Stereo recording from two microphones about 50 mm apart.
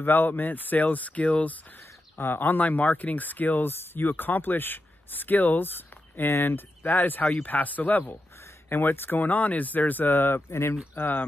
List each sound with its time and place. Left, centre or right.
0.0 s speech: left
2.1 s speech: left
8.6 s speech: left
11.0 s speech: left